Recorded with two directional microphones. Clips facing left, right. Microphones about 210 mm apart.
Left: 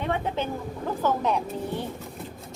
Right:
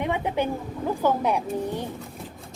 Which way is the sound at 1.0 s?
10° right (ahead or behind).